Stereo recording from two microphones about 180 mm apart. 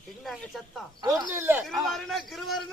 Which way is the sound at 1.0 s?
20° right (ahead or behind).